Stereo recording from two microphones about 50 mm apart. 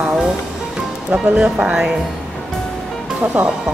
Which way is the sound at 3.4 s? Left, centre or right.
Right.